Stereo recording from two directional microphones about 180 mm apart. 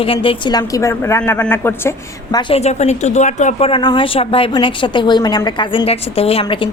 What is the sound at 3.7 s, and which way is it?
A woman's voice, 25° left (ahead or behind).